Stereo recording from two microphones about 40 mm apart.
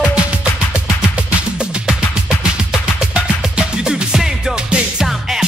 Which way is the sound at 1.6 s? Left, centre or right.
Centre.